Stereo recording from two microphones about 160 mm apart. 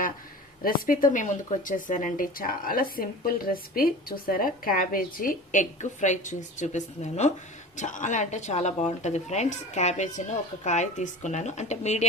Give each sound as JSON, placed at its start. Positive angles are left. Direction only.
{"t": 0.6, "sound": "a woman's voice", "side_deg": 60}